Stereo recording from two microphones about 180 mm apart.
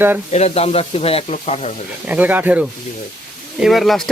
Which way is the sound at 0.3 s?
35° left (ahead or behind).